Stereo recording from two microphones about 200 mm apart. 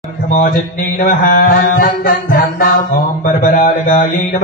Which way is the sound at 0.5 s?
40° left (ahead or behind).